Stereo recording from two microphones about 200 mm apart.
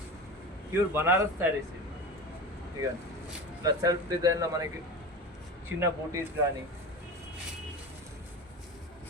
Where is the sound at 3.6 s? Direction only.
20° right (ahead or behind).